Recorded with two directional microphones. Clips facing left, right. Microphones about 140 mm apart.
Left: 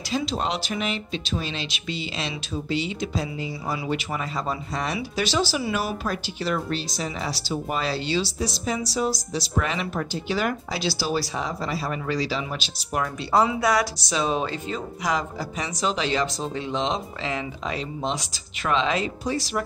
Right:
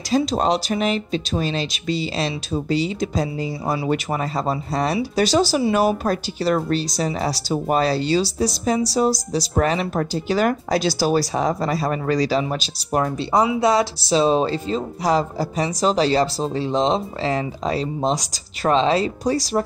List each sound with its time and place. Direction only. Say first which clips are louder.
0.1 s speech: right 7 dB; 40° right (ahead or behind)
13.3 s speech: right 2 dB; 15° right (ahead or behind)
13.7 s speech: right 5 dB; 30° right (ahead or behind)